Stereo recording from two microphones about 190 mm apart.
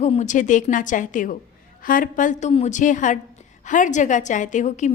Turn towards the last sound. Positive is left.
turn(degrees=40)  # may be behind; listen again after turning